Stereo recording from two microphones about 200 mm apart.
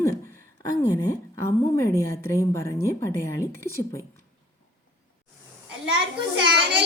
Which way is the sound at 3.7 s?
30° left (ahead or behind).